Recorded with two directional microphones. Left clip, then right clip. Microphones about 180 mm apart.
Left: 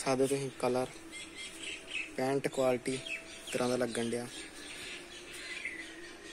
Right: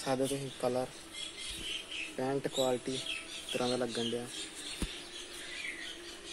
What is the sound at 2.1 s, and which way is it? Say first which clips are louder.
Speech: left 1 dB; 15° left (ahead or behind).